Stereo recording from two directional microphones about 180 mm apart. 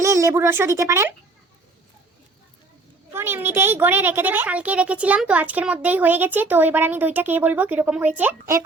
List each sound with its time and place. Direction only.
0.0 s speech: 15° right (ahead or behind)
3.1 s a child's voice: 15° right (ahead or behind)